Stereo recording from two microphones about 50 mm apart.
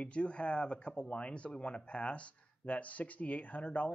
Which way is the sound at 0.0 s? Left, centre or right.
Left.